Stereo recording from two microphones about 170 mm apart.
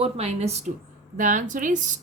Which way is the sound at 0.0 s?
40° right (ahead or behind).